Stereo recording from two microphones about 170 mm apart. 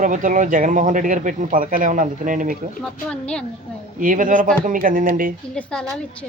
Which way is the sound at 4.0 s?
50° right (ahead or behind).